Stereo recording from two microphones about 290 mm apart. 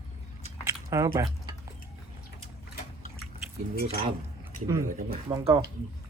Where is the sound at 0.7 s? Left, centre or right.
Centre.